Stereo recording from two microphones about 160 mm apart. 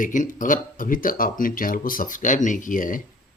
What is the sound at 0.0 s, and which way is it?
Speech, 55° left (ahead or behind).